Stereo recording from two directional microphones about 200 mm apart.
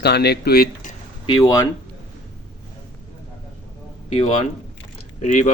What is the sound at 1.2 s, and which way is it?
Speech, 20° left (ahead or behind).